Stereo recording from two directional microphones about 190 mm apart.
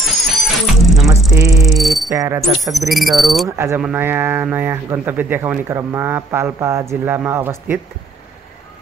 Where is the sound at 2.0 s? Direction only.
15° right (ahead or behind).